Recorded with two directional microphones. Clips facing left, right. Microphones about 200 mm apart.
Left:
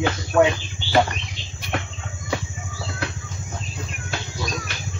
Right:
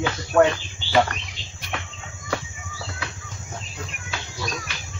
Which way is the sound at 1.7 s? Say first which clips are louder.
Left 5 dB; 55° left (ahead or behind).